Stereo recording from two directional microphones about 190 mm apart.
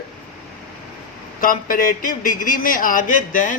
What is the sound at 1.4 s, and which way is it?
A man's voice, 45° left (ahead or behind).